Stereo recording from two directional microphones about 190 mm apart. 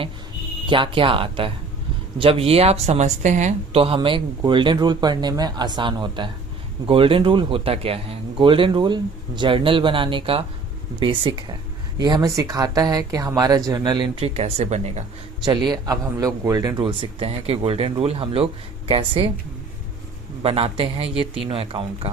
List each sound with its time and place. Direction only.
0.7 s a woman's voice: 25° right (ahead or behind)
15.4 s a woman's voice: 20° right (ahead or behind)
20.4 s a woman's voice: 30° right (ahead or behind)